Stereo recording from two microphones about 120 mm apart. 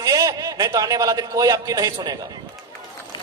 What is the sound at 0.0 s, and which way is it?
A man's voice, 30° right (ahead or behind).